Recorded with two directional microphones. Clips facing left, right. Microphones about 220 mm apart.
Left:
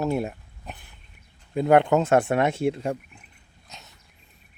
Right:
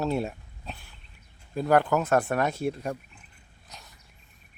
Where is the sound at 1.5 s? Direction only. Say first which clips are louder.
Left 4 dB; 20° left (ahead or behind).